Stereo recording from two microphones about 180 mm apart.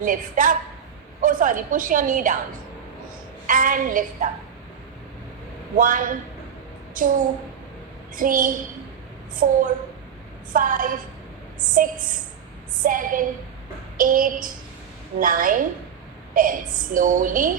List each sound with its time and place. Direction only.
0.0 s a woman's voice: 50° right (ahead or behind)
3.4 s a woman's voice: 50° right (ahead or behind)
5.7 s a woman's voice: 50° right (ahead or behind)